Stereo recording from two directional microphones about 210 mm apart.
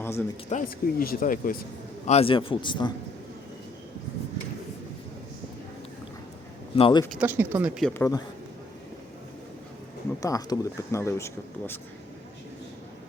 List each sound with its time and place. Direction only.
0.0 s speech: 10° left (ahead or behind)
0.5 s speech: 40° left (ahead or behind)
2.0 s speech: 30° left (ahead or behind)
6.7 s speech: 25° left (ahead or behind)
7.1 s speech: 5° right (ahead or behind)
7.9 s speech: 10° left (ahead or behind)
10.2 s speech: 15° left (ahead or behind)